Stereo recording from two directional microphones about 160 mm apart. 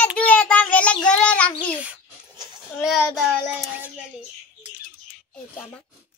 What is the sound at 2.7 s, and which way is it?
Speech, centre (ahead or behind).